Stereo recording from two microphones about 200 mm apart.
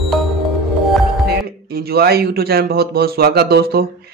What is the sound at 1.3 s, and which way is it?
Speech, 50° right (ahead or behind).